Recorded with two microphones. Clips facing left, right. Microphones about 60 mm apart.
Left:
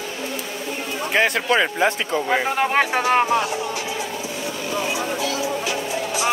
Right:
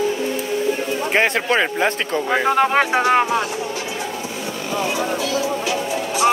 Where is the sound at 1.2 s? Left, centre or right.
Right.